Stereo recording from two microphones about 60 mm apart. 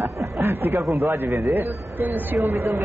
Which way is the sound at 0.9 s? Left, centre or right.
Right.